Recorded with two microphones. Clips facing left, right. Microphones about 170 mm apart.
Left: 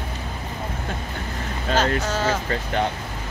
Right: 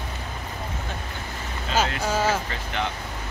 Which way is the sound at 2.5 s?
40° left (ahead or behind).